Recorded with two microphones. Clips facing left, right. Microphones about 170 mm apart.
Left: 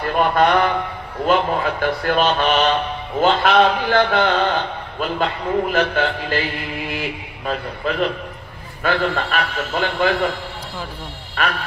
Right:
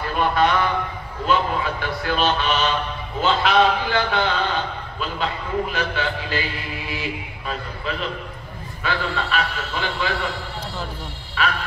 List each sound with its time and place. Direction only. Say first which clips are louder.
0.0 s a man's voice: left 3 dB; 50° left (ahead or behind)
7.8 s a man's voice: left 7 dB; 50° left (ahead or behind)
11.4 s a man's voice: left 1 dB; 50° left (ahead or behind)